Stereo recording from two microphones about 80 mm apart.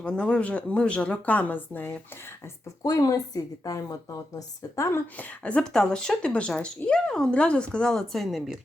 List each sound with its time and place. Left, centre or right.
0.0 s speech: centre
2.8 s a woman's voice: left
5.1 s speech: centre